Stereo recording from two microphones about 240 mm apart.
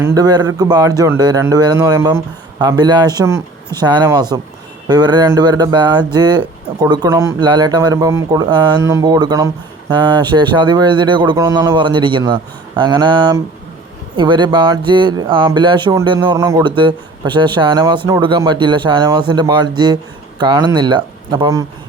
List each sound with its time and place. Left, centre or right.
0.0 s a man's voice: centre